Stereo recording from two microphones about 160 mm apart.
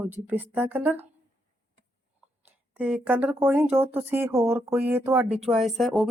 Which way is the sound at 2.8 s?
5° right (ahead or behind).